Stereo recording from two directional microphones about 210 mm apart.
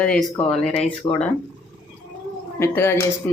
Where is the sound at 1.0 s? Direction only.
20° left (ahead or behind).